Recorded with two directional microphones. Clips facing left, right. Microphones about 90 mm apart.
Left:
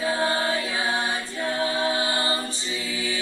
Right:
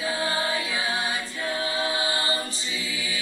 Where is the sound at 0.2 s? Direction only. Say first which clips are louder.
Left 3 dB; 35° left (ahead or behind).